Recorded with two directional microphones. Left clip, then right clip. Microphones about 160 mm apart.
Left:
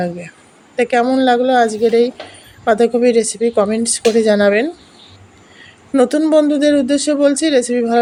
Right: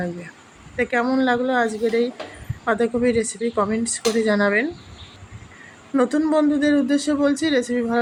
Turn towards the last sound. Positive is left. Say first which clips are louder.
# left 7 dB
turn(degrees=35)  # may be behind; listen again after turning